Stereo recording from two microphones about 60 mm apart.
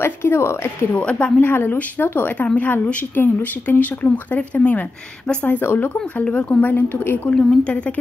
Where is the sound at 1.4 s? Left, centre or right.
Left.